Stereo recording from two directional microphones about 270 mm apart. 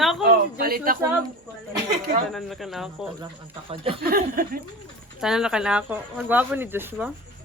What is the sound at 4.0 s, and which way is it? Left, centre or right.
Speech, right.